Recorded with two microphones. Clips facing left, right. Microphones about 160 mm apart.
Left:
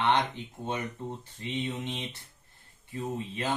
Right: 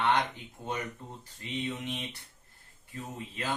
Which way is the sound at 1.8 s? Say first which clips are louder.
Left 1 dB; 20° left (ahead or behind).